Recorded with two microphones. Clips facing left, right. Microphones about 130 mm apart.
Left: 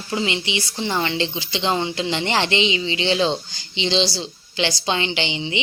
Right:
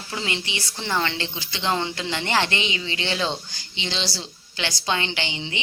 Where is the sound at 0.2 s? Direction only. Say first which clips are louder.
Left 4 dB; 15° left (ahead or behind).